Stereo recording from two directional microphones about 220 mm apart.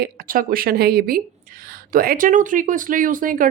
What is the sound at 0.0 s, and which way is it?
Speech, 40° right (ahead or behind).